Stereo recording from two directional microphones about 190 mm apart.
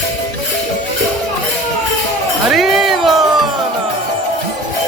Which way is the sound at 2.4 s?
Centre (ahead or behind).